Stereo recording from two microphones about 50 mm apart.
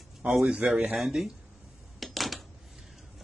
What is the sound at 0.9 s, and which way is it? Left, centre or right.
Speech, centre.